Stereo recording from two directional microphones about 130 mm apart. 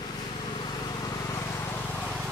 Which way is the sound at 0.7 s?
30° left (ahead or behind).